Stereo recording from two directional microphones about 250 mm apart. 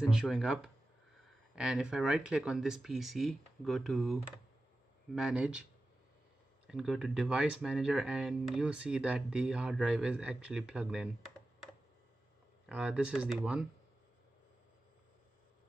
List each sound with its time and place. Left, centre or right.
0.0 s speech: centre
6.7 s speech: centre